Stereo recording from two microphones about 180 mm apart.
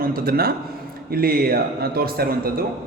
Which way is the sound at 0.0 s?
55° right (ahead or behind).